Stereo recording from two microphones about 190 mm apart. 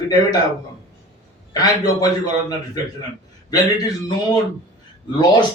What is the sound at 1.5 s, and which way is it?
Speech, 20° left (ahead or behind).